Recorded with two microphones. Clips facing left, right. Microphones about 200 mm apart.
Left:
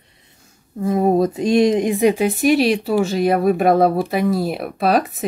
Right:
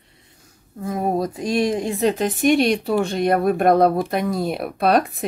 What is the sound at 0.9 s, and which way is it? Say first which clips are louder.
Speech: left 6 dB; 25° left (ahead or behind).